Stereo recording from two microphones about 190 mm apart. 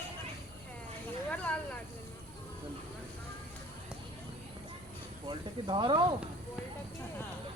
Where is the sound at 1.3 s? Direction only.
5° left (ahead or behind).